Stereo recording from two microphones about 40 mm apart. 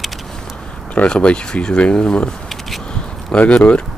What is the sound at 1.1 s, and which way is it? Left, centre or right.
Speech, left.